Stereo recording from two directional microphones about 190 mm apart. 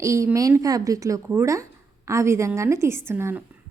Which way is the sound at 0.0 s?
15° right (ahead or behind).